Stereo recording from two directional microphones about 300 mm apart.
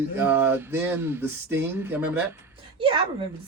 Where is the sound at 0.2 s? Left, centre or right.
Centre.